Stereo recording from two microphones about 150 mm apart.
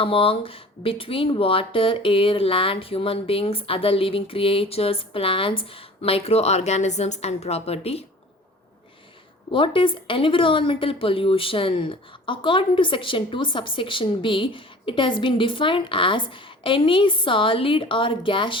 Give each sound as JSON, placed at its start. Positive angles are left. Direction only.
{"t": 0.0, "sound": "speech", "side_deg": 35}
{"t": 9.5, "sound": "speech", "side_deg": 35}